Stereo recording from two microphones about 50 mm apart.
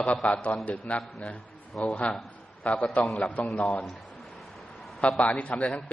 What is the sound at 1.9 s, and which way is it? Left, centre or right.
A man's voice, left.